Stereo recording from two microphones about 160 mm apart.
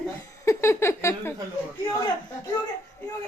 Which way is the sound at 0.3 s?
15° left (ahead or behind).